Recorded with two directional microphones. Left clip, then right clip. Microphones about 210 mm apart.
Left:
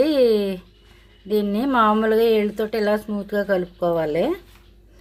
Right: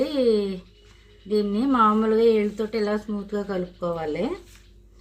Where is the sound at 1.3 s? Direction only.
55° left (ahead or behind).